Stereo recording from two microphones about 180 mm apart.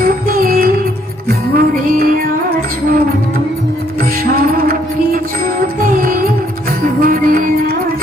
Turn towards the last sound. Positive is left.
turn(degrees=-50)  # may be behind; listen again after turning